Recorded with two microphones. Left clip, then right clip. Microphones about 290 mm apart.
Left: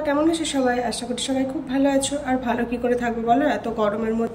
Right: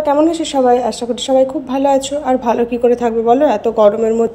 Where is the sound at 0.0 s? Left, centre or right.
Centre.